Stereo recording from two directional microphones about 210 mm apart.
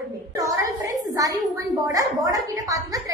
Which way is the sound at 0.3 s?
15° right (ahead or behind).